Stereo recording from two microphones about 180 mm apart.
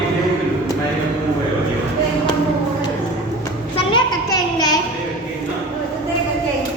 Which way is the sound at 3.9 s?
20° left (ahead or behind).